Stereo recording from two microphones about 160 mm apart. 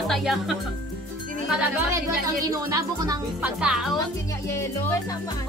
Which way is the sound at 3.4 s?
5° right (ahead or behind).